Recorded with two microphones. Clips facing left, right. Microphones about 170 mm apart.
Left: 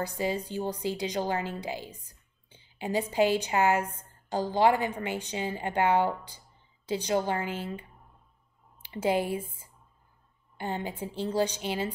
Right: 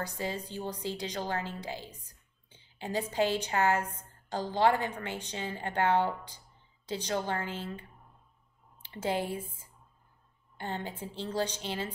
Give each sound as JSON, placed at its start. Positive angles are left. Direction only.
{"t": 0.0, "sound": "a woman's voice", "side_deg": 10}
{"t": 8.8, "sound": "speech", "side_deg": 10}
{"t": 10.6, "sound": "a woman's voice", "side_deg": 10}